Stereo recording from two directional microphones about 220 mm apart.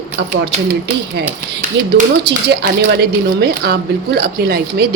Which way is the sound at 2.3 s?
50° right (ahead or behind).